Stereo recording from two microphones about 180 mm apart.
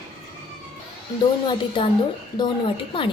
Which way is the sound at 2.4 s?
25° left (ahead or behind).